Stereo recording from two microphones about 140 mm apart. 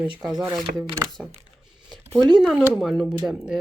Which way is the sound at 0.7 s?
90° right.